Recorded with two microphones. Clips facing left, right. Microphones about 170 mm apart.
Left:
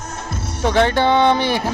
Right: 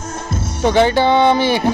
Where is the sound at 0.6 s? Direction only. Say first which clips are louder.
Right 3 dB; centre (ahead or behind).